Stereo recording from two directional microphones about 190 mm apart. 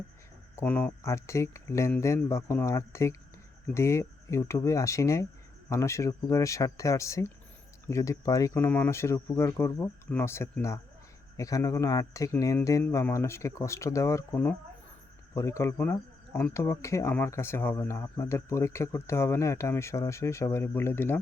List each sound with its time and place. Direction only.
0.5 s speech: 10° left (ahead or behind)